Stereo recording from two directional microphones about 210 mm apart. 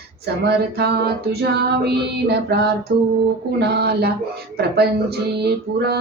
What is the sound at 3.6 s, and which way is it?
Music, 50° right (ahead or behind).